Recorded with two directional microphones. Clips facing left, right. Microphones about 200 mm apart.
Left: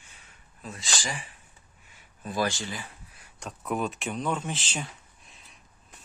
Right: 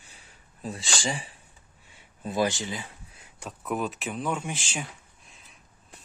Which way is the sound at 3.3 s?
5° right (ahead or behind).